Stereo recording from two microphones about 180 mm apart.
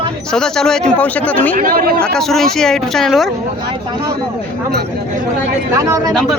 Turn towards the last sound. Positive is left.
turn(degrees=-20)  # may be behind; listen again after turning